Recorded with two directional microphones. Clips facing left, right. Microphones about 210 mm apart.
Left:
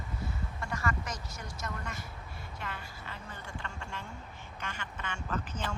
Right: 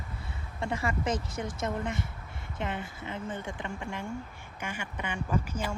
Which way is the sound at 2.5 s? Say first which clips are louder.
Right 9 dB; 20° right (ahead or behind).